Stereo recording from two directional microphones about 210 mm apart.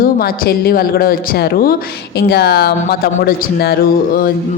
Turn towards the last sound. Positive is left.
turn(degrees=45)  # may be behind; listen again after turning